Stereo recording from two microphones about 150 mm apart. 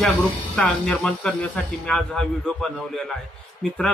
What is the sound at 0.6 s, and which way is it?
A man's voice, 10° left (ahead or behind).